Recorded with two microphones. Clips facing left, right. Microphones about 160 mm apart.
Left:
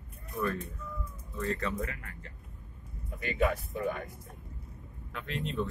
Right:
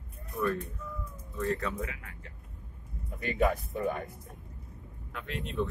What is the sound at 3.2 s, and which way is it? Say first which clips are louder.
Speech: right 1 dB; 40° right (ahead or behind).